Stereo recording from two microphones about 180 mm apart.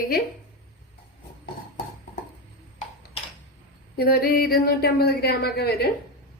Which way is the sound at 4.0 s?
55° left (ahead or behind).